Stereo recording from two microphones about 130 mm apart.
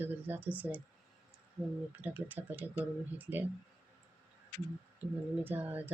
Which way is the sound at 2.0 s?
15° right (ahead or behind).